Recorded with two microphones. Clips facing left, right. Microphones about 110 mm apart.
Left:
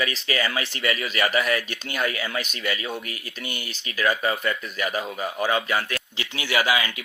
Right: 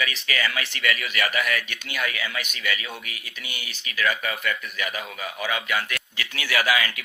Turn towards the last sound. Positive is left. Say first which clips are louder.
# left 1 dB
turn(degrees=25)  # may be behind; listen again after turning